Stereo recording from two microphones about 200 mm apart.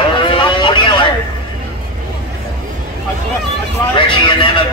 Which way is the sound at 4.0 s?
25° left (ahead or behind).